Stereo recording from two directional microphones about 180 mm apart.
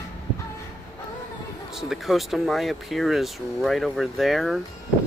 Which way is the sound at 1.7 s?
Centre (ahead or behind).